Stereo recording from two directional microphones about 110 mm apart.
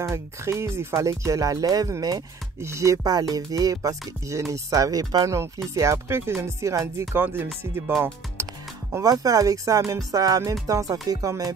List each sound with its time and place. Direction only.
0.0 s speech: 25° right (ahead or behind)
8.9 s speech: 35° right (ahead or behind)